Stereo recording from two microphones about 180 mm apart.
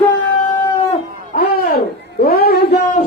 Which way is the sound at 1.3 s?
55° left (ahead or behind).